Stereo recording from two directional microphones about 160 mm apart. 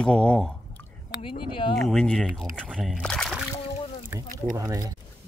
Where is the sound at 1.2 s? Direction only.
35° left (ahead or behind).